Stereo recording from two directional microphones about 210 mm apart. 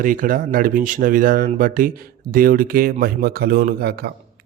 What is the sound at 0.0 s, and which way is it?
Speech, 40° right (ahead or behind).